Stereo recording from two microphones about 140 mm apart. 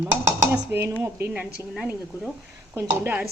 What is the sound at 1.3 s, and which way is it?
Speech, 5° right (ahead or behind).